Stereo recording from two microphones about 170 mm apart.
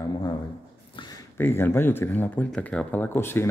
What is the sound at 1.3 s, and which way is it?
Speech, 15° left (ahead or behind).